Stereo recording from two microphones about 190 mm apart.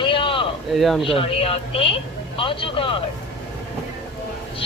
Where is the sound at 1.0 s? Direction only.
30° left (ahead or behind).